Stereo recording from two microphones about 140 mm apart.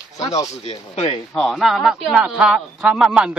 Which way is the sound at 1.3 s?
Centre (ahead or behind).